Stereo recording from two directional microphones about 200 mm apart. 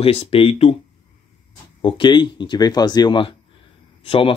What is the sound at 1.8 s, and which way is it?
Speech, 25° left (ahead or behind).